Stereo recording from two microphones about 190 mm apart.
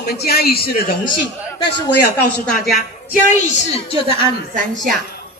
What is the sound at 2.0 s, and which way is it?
Speech, 60° left (ahead or behind).